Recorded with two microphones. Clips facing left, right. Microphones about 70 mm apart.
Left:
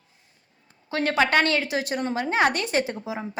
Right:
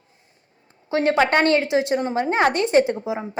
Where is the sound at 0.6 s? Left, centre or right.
Right.